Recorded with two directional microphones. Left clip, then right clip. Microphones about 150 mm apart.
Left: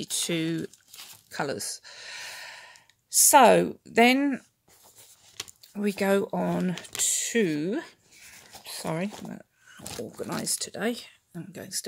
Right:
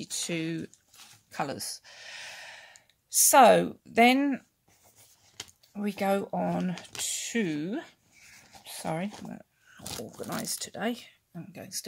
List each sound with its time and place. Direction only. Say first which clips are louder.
0.0 s speech: left 4 dB; 35° left (ahead or behind)
9.3 s a sound: left 2 dB; 20° left (ahead or behind)
10.1 s speech: left 4 dB; 25° left (ahead or behind)